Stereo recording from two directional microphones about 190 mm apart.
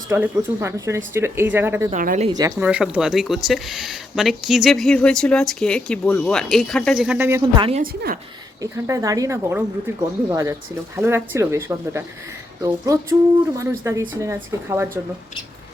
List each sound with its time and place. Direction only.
0.1 s speech: 15° right (ahead or behind)
1.9 s a woman's voice: 40° right (ahead or behind)
2.3 s speech: 20° right (ahead or behind)
2.6 s speech: 5° right (ahead or behind)
7.8 s a woman's voice: 45° right (ahead or behind)
8.6 s speech: 20° right (ahead or behind)